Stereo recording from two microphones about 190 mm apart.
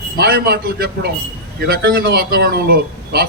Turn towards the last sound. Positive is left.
turn(degrees=-55)  # may be behind; listen again after turning